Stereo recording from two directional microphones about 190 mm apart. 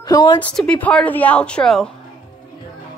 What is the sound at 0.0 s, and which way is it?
Speech, 20° left (ahead or behind).